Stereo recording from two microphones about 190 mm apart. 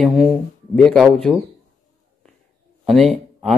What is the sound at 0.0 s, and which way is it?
Speech, centre (ahead or behind).